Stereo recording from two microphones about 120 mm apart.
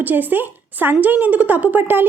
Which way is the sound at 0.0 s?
15° right (ahead or behind).